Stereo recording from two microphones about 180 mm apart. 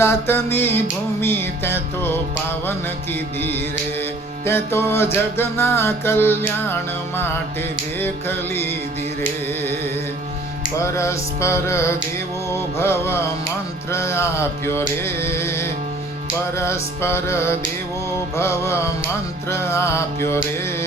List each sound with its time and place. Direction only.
0.0 s music: 15° left (ahead or behind)
4.4 s music: 15° left (ahead or behind)
8.0 s music: 10° left (ahead or behind)
10.8 s music: 15° left (ahead or behind)